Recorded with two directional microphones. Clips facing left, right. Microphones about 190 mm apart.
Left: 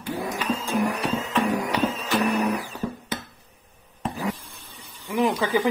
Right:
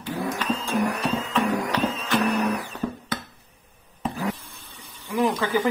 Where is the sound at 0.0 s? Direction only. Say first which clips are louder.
Even; 10° left (ahead or behind).